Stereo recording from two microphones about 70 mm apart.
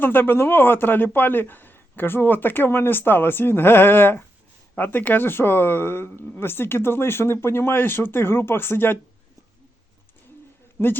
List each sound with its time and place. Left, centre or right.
0.0 s speech: left